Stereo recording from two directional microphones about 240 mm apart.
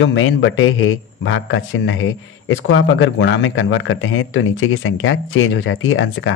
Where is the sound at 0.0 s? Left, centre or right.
Left.